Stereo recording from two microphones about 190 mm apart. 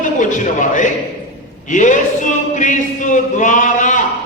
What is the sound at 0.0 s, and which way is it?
A man's voice, 40° left (ahead or behind).